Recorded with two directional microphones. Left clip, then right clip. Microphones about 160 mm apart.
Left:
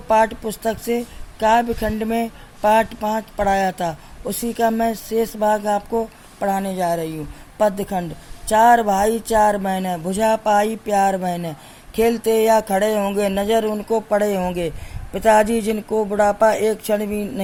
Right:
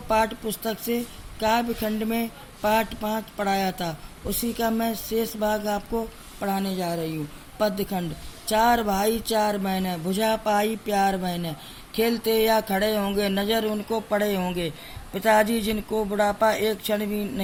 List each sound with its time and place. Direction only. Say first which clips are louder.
0.4 s a woman's voice: left 6 dB; 30° left (ahead or behind)